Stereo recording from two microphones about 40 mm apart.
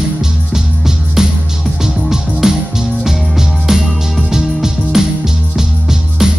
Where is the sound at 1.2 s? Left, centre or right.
Centre.